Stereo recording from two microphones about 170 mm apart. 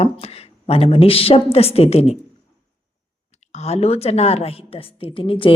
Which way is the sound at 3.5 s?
40° left (ahead or behind).